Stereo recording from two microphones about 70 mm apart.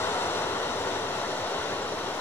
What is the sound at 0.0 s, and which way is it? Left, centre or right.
Vehicle, left.